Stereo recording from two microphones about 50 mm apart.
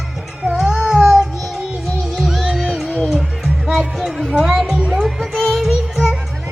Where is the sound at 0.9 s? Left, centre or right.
Centre.